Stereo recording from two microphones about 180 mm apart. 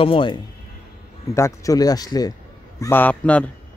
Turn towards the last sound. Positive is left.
turn(degrees=10)  # may be behind; listen again after turning